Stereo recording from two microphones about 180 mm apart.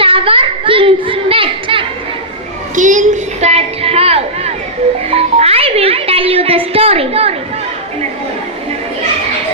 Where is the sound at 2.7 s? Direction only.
45° right (ahead or behind).